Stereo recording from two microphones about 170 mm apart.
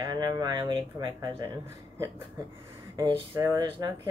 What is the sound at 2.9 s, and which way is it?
Speech, 20° right (ahead or behind).